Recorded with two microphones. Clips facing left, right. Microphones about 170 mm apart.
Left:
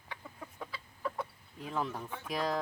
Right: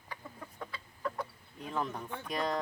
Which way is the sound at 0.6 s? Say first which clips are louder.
Even; 5° left (ahead or behind).